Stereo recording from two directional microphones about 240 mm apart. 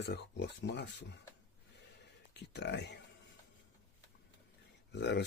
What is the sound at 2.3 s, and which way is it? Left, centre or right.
Speech, left.